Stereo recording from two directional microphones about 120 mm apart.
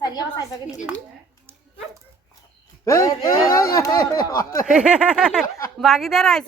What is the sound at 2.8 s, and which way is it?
Speech, 25° left (ahead or behind).